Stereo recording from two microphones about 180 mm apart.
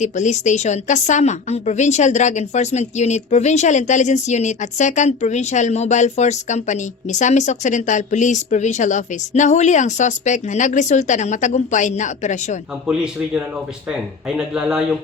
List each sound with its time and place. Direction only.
0.0 s a woman's voice: 40° left (ahead or behind)
12.9 s speech: 5° right (ahead or behind)